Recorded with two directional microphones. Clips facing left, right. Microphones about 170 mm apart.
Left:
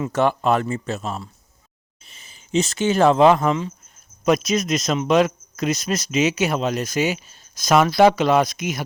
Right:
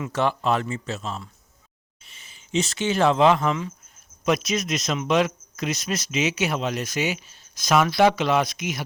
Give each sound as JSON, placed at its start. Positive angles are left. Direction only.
{"t": 0.1, "sound": "a man's voice", "side_deg": 50}